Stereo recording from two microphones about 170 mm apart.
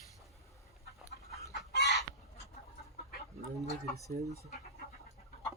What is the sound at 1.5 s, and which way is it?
Chicken, 75° left (ahead or behind).